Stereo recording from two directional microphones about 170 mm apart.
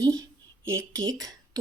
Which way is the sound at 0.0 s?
20° right (ahead or behind).